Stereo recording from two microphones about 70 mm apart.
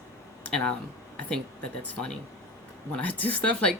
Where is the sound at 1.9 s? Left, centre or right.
Centre.